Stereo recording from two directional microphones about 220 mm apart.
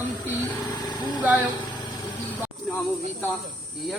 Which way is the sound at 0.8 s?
20° left (ahead or behind).